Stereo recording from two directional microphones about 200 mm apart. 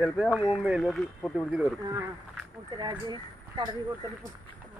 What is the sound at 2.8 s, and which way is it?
Speech, 20° right (ahead or behind).